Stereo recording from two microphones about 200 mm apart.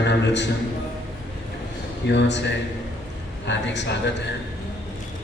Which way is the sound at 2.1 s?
60° left (ahead or behind).